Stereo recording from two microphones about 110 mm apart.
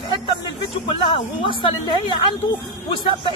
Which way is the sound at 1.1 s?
50° left (ahead or behind).